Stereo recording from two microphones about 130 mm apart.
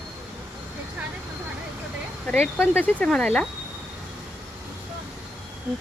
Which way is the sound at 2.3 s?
5° left (ahead or behind).